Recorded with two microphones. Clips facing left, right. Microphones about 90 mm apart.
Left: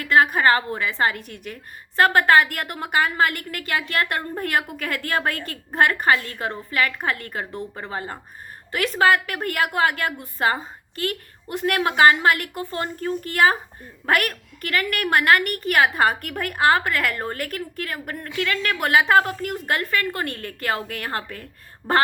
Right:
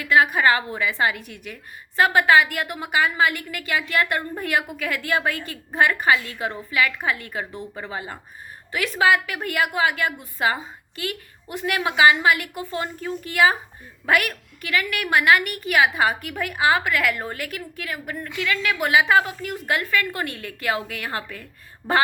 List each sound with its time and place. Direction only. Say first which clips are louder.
0.0 s a woman's voice: even; 45° left (ahead or behind)